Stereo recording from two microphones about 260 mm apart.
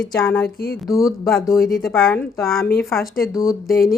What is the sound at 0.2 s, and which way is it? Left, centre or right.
A woman's voice, centre.